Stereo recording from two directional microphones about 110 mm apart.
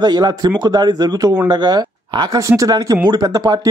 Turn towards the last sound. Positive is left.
turn(degrees=-35)  # may be behind; listen again after turning